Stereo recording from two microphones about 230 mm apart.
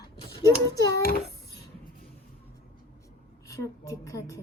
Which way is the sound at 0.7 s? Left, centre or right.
Centre.